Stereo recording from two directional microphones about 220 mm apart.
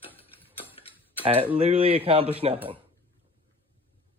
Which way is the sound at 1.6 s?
25° right (ahead or behind).